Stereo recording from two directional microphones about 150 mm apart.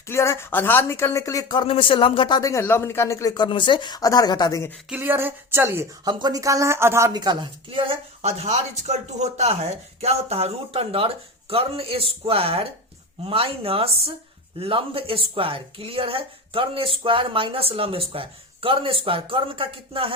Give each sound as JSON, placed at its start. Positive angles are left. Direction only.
{"t": 0.1, "sound": "speech", "side_deg": 15}
{"t": 4.9, "sound": "speech", "side_deg": -15}
{"t": 6.1, "sound": "speech", "side_deg": -30}